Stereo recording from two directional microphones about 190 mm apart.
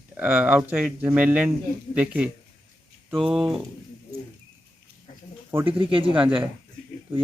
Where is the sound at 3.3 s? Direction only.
5° right (ahead or behind).